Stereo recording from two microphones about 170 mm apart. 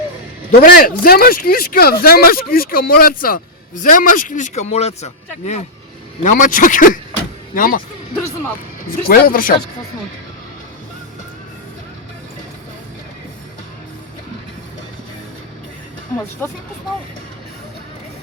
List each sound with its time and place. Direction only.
0.6 s speech: 60° left (ahead or behind)
8.9 s speech: 60° left (ahead or behind)
16.4 s speech: 10° left (ahead or behind)